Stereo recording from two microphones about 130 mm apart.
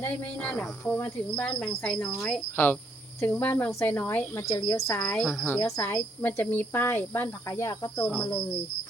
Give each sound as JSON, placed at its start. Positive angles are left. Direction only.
{"t": 0.0, "sound": "a woman's voice", "side_deg": 15}
{"t": 2.6, "sound": "a woman's voice", "side_deg": 20}